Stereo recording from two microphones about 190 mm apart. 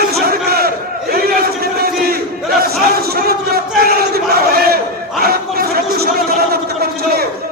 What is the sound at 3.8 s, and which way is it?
Battle cry, 55° right (ahead or behind).